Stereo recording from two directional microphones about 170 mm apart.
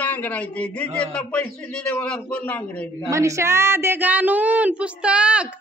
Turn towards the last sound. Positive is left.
turn(degrees=-5)  # may be behind; listen again after turning